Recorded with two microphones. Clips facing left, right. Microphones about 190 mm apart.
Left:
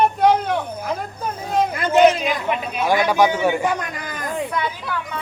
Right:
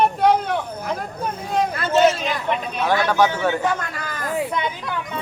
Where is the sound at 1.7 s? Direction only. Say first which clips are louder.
Left 3 dB; 15° left (ahead or behind).